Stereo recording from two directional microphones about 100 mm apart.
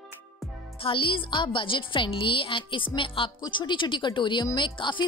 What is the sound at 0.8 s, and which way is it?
A woman's voice, 60° left (ahead or behind).